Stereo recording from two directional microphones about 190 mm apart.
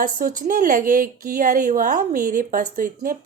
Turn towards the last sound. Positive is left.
turn(degrees=-45)  # may be behind; listen again after turning